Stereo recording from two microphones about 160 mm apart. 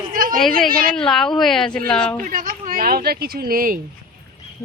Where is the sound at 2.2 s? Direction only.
55° right (ahead or behind).